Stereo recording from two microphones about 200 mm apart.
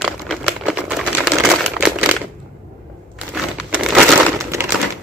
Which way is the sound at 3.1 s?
Centre (ahead or behind).